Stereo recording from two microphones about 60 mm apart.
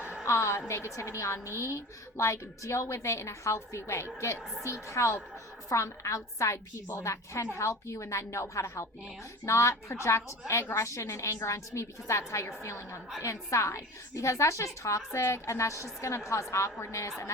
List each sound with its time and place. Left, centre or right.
0.3 s a woman's voice: left